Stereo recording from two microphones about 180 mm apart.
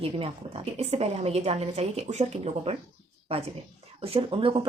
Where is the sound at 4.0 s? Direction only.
30° right (ahead or behind).